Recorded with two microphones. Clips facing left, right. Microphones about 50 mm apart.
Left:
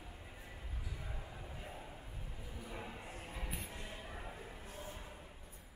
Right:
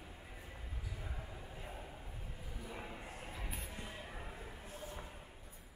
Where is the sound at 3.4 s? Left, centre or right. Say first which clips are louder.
Left 3 dB; centre.